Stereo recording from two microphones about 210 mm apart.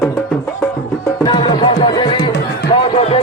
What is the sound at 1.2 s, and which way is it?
Music, 25° left (ahead or behind).